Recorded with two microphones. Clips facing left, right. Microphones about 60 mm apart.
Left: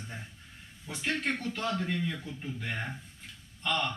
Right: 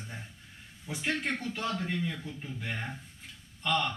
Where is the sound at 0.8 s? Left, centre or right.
Centre.